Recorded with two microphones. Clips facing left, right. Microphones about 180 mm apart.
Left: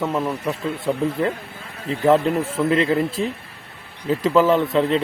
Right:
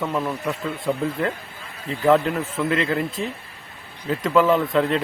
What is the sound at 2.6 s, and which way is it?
Speech, 35° left (ahead or behind).